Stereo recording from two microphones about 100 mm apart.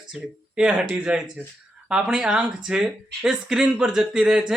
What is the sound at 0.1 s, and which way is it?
Speech, 10° right (ahead or behind).